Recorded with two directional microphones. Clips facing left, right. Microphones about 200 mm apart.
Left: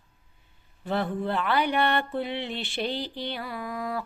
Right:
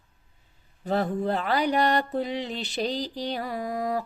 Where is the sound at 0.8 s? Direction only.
40° right (ahead or behind).